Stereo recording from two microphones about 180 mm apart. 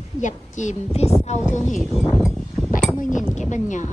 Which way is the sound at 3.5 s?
40° left (ahead or behind).